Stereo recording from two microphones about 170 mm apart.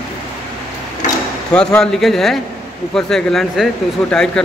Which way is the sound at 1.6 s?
5° left (ahead or behind).